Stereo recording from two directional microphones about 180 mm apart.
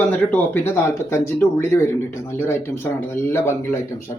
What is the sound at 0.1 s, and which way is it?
Speech, 5° left (ahead or behind).